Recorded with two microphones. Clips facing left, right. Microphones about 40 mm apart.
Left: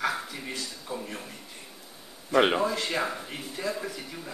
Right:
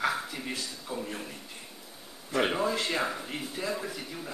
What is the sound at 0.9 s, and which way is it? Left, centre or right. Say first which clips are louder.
Speech: even; centre.